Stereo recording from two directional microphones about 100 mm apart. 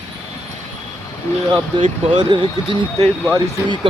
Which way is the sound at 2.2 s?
55° right (ahead or behind).